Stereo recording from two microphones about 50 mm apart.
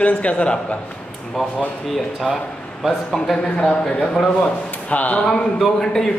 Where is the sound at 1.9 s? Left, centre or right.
Centre.